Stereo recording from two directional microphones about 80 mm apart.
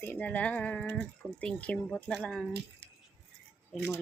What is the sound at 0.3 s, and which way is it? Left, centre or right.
Speech, centre.